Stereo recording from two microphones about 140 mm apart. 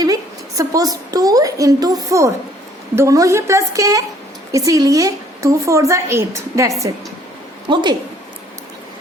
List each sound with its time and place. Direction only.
0.0 s a woman's voice: 25° right (ahead or behind)
7.7 s a woman's voice: 35° right (ahead or behind)